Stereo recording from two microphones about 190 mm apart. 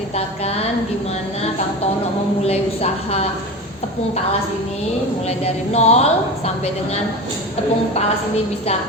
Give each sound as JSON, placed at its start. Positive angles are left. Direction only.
{"t": 0.2, "sound": "a woman's voice", "side_deg": 35}
{"t": 2.4, "sound": "a woman's voice", "side_deg": 35}
{"t": 5.7, "sound": "a woman's voice", "side_deg": 35}